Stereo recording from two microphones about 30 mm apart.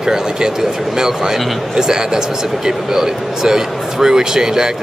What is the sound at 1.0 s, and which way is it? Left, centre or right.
Speech, centre.